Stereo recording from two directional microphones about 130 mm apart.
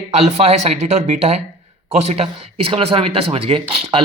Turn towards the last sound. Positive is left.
turn(degrees=-45)  # may be behind; listen again after turning